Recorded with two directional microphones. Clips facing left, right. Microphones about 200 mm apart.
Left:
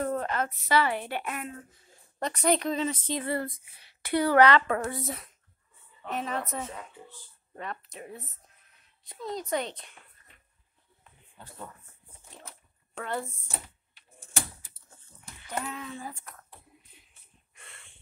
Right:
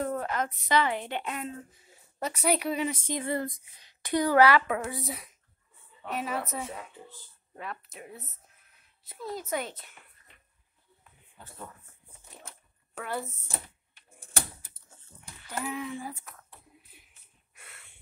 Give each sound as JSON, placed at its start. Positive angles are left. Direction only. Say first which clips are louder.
{"t": 0.0, "sound": "a woman's voice", "louder": "left 1 dB", "side_deg": -10}
{"t": 1.9, "sound": "speech", "louder": "left 1 dB", "side_deg": -5}
{"t": 12.9, "sound": "speech", "louder": "left 1 dB", "side_deg": -5}
{"t": 15.4, "sound": "speech", "louder": "right 2 dB", "side_deg": -10}
{"t": 17.6, "sound": "snort", "louder": "left 1 dB", "side_deg": -5}